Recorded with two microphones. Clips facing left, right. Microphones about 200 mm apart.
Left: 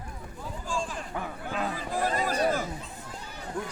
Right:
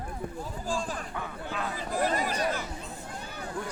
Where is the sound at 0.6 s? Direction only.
35° right (ahead or behind).